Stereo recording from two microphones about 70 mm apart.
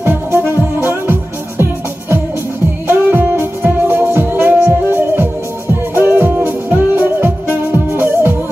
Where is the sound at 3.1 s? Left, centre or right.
Right.